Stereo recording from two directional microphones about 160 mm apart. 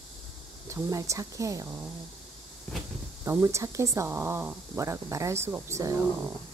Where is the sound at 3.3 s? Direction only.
20° right (ahead or behind).